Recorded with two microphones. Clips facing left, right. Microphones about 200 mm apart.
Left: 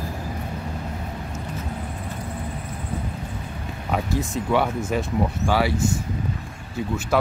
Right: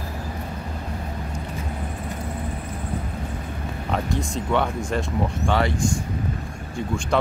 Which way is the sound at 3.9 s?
5° left (ahead or behind).